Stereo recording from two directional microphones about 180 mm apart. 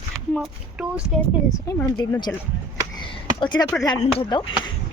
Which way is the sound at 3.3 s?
25° left (ahead or behind).